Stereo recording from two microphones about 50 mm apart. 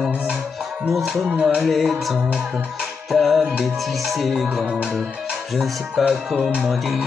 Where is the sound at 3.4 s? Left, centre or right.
Centre.